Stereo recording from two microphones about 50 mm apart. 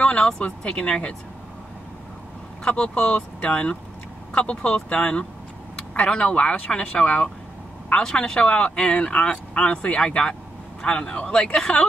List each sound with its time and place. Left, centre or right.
0.4 s speech: left
2.6 s speech: centre